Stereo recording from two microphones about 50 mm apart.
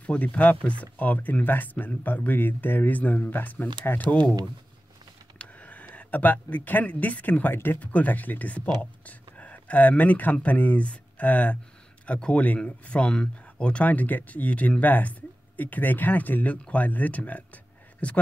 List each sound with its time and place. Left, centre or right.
0.0 s speech: left
5.4 s speech: left
7.5 s speech: left
7.8 s speech: left